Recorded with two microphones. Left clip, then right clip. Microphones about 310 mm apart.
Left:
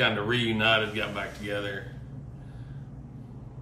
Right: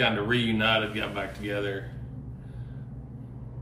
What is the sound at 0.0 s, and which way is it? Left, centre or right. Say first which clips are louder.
A man's voice: even; centre.